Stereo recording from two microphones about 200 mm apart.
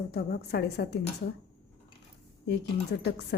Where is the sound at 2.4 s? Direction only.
55° left (ahead or behind).